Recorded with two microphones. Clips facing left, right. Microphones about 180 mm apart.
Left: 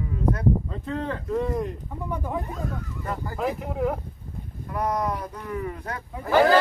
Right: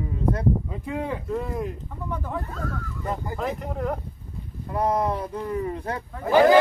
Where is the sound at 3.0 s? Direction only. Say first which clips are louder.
Right 3 dB; 20° right (ahead or behind).